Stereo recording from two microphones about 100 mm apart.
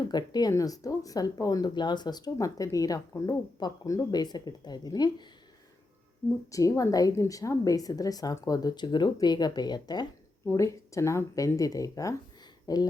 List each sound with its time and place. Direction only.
0.1 s speech: 45° left (ahead or behind)
6.5 s speech: 35° left (ahead or behind)
10.6 s speech: 30° left (ahead or behind)